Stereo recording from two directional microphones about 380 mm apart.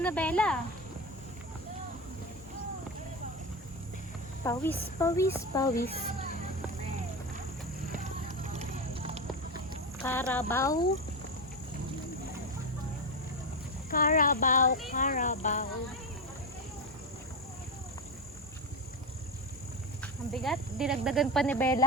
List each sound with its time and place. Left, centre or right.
0.0 s speech: centre
4.4 s speech: centre
8.5 s music: centre
10.0 s speech: centre
13.9 s child singing: left
20.0 s speech: centre